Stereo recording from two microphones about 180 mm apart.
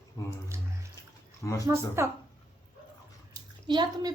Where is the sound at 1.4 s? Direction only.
15° left (ahead or behind).